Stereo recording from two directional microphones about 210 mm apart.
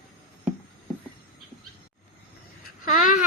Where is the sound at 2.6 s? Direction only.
40° left (ahead or behind).